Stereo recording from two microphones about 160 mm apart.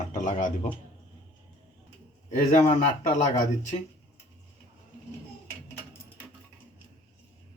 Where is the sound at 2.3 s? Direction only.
50° left (ahead or behind).